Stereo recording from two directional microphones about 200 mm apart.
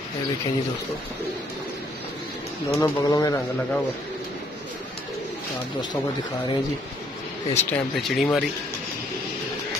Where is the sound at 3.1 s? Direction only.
20° left (ahead or behind).